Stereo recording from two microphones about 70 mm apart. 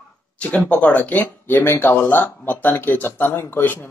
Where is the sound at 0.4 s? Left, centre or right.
Centre.